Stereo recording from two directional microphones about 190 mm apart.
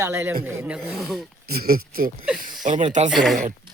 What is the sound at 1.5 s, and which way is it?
Speech, 55° right (ahead or behind).